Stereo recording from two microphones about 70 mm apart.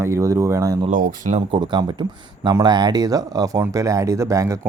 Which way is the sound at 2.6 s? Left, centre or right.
Right.